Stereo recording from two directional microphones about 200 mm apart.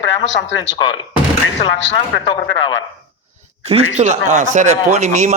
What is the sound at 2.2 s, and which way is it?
Speech, 25° left (ahead or behind).